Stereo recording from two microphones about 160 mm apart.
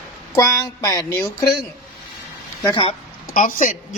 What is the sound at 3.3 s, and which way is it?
Speech, 60° left (ahead or behind).